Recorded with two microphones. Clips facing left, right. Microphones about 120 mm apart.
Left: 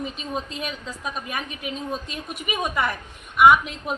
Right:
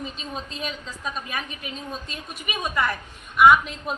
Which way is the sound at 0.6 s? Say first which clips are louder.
Left 1 dB; 10° left (ahead or behind).